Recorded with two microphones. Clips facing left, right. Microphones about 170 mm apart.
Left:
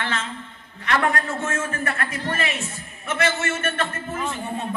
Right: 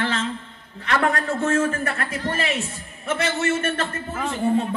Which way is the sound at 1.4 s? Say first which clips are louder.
Right 5 dB; 30° right (ahead or behind).